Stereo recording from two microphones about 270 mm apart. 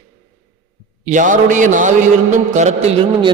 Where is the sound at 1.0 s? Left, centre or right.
Right.